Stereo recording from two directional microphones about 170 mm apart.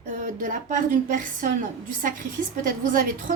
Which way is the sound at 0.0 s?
50° right (ahead or behind).